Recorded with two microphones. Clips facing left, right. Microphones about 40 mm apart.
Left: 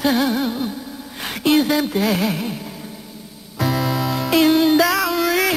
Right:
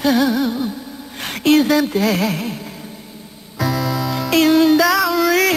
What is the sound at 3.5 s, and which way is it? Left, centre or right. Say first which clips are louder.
Music: even; centre.